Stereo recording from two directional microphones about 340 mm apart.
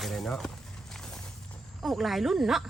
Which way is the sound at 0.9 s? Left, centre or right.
Centre.